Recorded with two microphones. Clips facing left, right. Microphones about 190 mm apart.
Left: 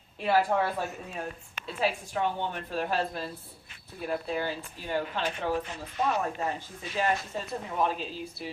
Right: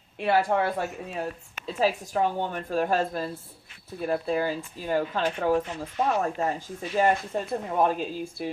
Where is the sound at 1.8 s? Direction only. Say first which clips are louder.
Right 4 dB; 40° right (ahead or behind).